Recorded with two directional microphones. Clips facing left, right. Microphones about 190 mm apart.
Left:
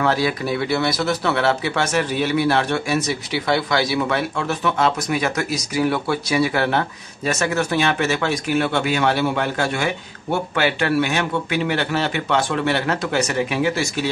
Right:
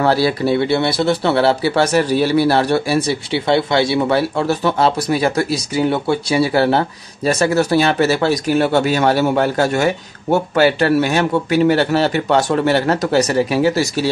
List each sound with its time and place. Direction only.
0.0 s speech: 35° right (ahead or behind)